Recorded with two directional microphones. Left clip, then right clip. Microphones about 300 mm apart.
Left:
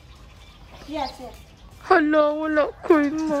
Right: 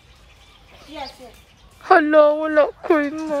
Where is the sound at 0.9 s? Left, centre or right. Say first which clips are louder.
Left 4 dB; left.